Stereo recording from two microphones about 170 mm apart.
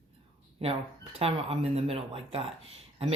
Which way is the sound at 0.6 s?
35° right (ahead or behind).